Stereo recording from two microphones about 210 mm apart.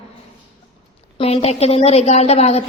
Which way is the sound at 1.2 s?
30° left (ahead or behind).